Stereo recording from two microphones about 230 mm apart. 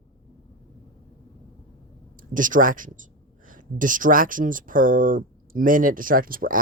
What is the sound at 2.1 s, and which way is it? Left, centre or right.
Speech, right.